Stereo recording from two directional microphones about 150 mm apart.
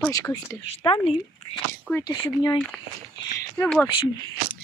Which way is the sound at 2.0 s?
30° left (ahead or behind).